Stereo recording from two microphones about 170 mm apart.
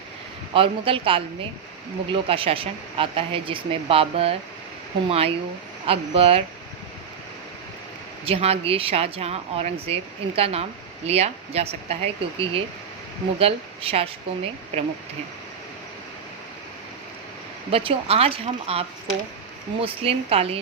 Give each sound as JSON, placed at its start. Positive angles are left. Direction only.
{"t": 0.5, "sound": "speech", "side_deg": -30}
{"t": 8.2, "sound": "speech", "side_deg": -35}
{"t": 17.7, "sound": "speech", "side_deg": -35}